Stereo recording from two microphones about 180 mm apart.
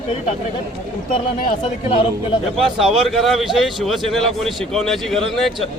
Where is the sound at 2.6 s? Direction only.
Centre (ahead or behind).